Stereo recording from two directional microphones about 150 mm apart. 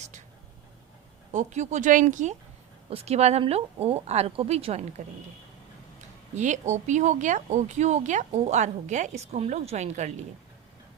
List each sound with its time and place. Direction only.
1.3 s speech: 50° right (ahead or behind)
2.9 s speech: 45° right (ahead or behind)
6.3 s speech: 50° right (ahead or behind)